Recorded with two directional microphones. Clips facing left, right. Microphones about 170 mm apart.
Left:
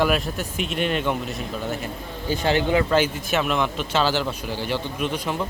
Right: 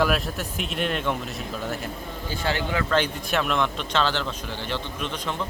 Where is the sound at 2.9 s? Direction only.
5° left (ahead or behind).